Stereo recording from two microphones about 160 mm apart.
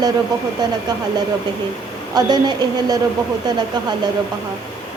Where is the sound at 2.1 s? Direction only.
25° right (ahead or behind).